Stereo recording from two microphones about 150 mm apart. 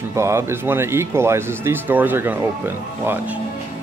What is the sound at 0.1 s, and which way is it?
Speech, 20° right (ahead or behind).